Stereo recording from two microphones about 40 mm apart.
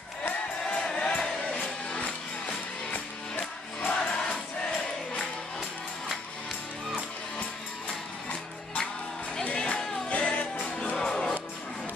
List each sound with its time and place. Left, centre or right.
0.7 s music: left
2.9 s music: left
3.9 s music: left
9.7 s music: centre
10.0 s music: left
11.0 s music: centre